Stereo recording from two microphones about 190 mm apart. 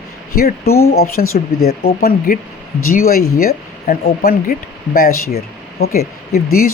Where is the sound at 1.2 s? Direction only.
45° left (ahead or behind).